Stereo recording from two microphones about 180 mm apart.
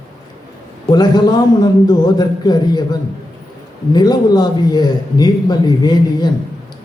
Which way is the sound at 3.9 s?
20° left (ahead or behind).